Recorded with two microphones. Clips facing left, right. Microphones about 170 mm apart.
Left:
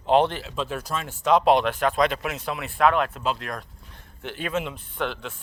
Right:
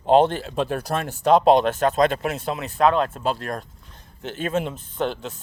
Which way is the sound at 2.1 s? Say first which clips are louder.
Right 4 dB; 30° right (ahead or behind).